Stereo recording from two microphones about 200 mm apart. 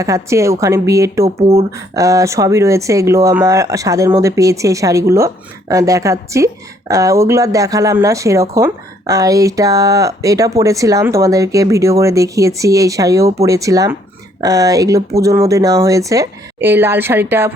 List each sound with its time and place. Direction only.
0.0 s speech: 15° right (ahead or behind)